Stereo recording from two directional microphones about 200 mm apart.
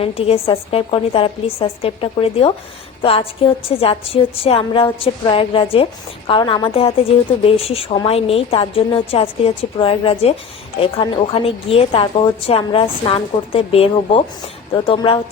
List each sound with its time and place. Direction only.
0.0 s a woman's voice: 30° left (ahead or behind)